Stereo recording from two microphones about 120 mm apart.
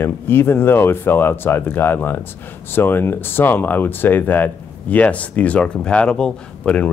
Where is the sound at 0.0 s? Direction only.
20° left (ahead or behind).